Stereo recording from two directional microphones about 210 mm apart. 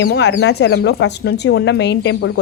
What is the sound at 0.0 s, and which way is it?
Speech, 55° left (ahead or behind).